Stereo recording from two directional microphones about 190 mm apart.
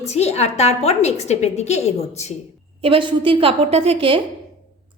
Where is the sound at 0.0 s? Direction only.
35° left (ahead or behind).